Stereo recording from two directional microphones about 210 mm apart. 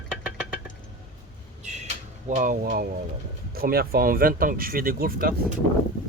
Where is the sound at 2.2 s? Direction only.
35° right (ahead or behind).